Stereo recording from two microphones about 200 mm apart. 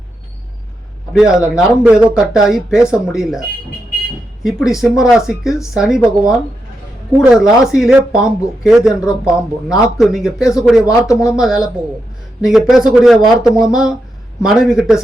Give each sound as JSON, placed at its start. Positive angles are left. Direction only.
{"t": 1.1, "sound": "speech", "side_deg": -5}
{"t": 4.4, "sound": "speech", "side_deg": 0}
{"t": 10.8, "sound": "speech", "side_deg": 15}
{"t": 11.3, "sound": "speech", "side_deg": 0}